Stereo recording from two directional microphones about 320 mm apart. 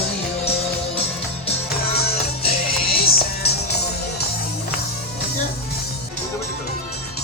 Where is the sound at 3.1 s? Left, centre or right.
Left.